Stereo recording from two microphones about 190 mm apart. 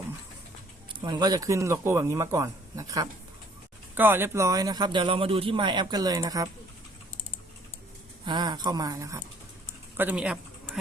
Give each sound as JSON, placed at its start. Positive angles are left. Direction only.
{"t": 0.9, "sound": "a man's voice", "side_deg": -25}
{"t": 8.2, "sound": "a man's voice", "side_deg": -25}